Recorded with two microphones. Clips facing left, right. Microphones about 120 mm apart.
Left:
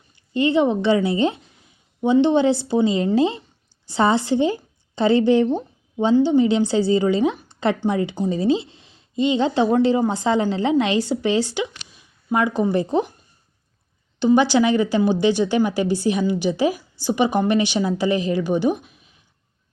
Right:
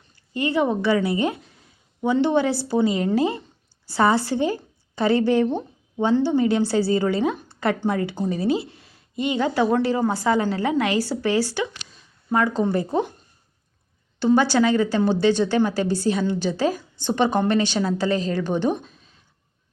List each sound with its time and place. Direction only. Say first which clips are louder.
0.3 s a woman's voice: left 4 dB; 25° left (ahead or behind)
14.3 s a woman's voice: left 2 dB; 15° left (ahead or behind)